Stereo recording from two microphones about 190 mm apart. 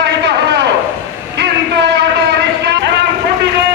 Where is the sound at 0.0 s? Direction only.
60° right (ahead or behind).